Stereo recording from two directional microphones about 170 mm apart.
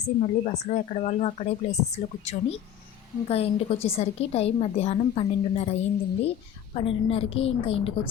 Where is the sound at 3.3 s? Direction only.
35° left (ahead or behind).